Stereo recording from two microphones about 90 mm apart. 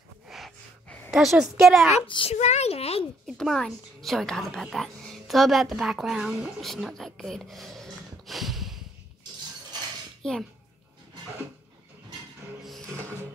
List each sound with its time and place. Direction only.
1.1 s a woman's voice: centre (ahead or behind)
2.0 s a child's voice: 80° left
3.3 s a woman's voice: 5° left (ahead or behind)
10.2 s a child's voice: 10° left (ahead or behind)
12.6 s music: centre (ahead or behind)